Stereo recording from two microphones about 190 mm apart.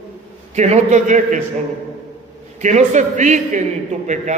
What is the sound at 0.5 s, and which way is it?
Speech, 35° right (ahead or behind).